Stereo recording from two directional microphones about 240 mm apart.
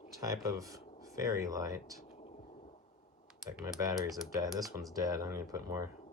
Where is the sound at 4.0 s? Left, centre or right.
Centre.